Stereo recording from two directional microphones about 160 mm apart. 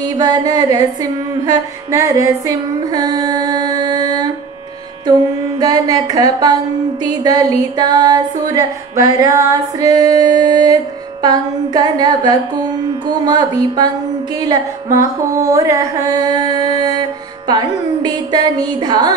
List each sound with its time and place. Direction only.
0.2 s music: 25° right (ahead or behind)
1.9 s music: 20° right (ahead or behind)
5.6 s music: 25° right (ahead or behind)